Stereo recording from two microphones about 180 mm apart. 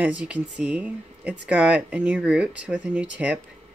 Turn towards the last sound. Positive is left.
turn(degrees=-5)  # may be behind; listen again after turning